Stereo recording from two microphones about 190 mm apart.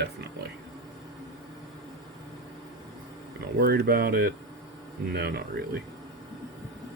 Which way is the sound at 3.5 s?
55° right (ahead or behind).